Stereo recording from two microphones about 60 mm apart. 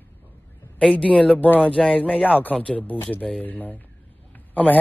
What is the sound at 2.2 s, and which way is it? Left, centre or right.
Speech, left.